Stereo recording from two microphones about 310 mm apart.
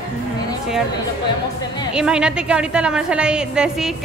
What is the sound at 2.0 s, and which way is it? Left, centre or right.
A woman's voice, centre.